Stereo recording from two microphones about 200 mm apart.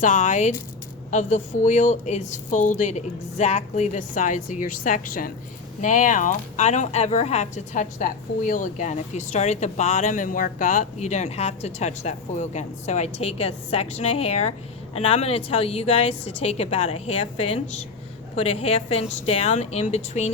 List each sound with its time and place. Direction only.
0.0 s a woman's voice: 40° left (ahead or behind)